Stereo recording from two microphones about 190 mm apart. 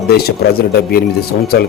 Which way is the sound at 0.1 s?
55° left (ahead or behind).